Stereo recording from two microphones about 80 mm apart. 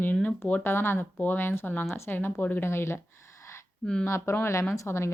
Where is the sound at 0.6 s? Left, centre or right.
Left.